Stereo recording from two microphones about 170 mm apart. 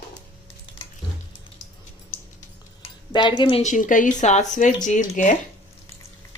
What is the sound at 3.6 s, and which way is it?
Speech, 50° left (ahead or behind).